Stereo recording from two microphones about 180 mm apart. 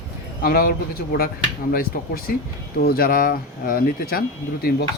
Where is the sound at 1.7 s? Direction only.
55° left (ahead or behind).